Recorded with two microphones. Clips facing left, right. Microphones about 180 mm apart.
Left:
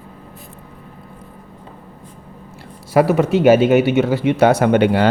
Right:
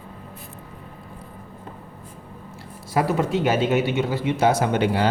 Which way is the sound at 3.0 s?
75° left (ahead or behind).